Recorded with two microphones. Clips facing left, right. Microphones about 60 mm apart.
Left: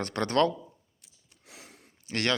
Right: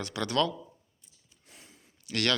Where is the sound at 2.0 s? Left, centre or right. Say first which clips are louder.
Even; left.